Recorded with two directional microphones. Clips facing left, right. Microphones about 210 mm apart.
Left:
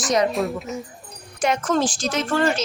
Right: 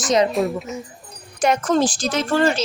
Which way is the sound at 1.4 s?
35° right (ahead or behind).